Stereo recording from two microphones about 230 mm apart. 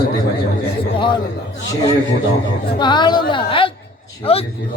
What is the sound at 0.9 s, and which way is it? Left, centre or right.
Speech, left.